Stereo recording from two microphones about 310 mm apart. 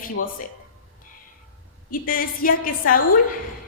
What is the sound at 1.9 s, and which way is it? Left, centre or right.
A woman's voice, left.